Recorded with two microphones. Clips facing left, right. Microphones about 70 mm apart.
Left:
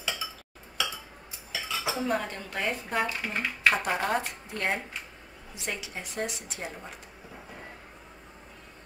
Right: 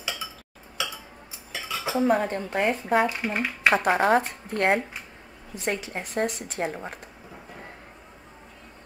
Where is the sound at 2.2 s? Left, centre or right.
Right.